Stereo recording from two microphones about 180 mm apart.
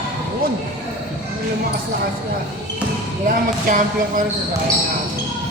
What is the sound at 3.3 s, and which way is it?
Speech, 45° right (ahead or behind).